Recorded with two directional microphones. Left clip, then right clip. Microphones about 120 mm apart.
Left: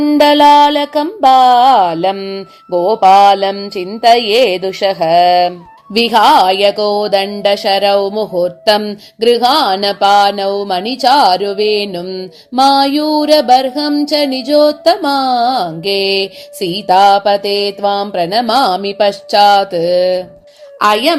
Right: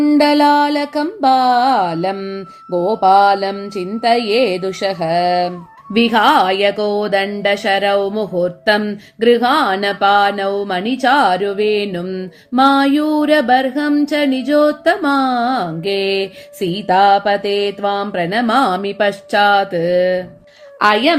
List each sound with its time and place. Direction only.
0.0 s mantra: 25° left (ahead or behind); by 20.2 s 40° left (ahead or behind)
20.7 s a woman's voice: 55° left (ahead or behind)